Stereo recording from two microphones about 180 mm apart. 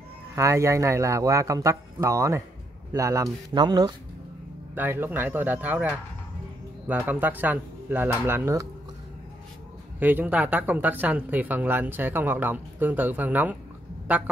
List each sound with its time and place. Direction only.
0.4 s speech: 15° right (ahead or behind)
4.7 s speech: 10° right (ahead or behind)
9.9 s speech: 10° right (ahead or behind)